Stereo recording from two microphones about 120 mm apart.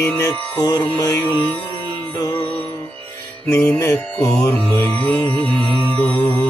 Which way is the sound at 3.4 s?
15° left (ahead or behind).